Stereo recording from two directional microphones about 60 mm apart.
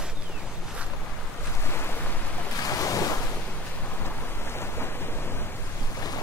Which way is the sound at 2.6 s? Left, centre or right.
Left.